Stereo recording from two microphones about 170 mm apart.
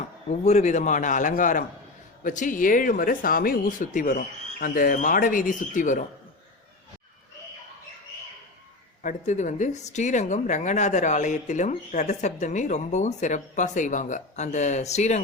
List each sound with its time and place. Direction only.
0.3 s a woman's voice: 45° left (ahead or behind)
9.0 s a woman's voice: 45° left (ahead or behind)